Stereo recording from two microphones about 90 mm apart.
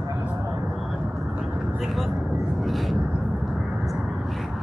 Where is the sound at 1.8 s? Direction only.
Centre (ahead or behind).